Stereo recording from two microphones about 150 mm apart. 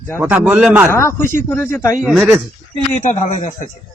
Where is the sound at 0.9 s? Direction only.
15° left (ahead or behind).